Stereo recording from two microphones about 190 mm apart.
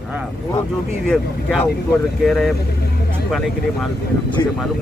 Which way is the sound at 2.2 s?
Centre (ahead or behind).